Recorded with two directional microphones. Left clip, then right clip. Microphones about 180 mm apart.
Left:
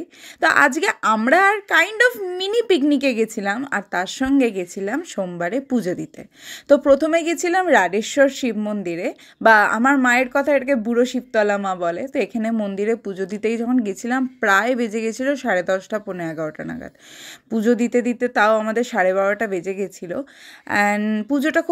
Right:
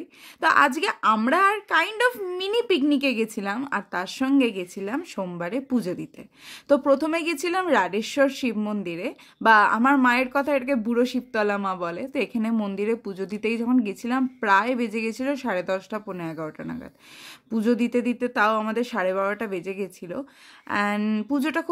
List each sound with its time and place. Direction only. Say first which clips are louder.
0.4 s a woman's voice: left 4 dB; 20° left (ahead or behind)